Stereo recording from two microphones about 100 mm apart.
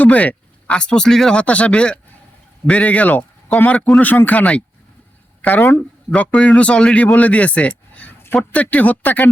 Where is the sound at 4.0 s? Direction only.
15° left (ahead or behind).